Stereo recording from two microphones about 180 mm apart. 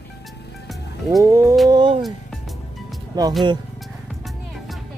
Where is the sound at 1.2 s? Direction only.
15° right (ahead or behind).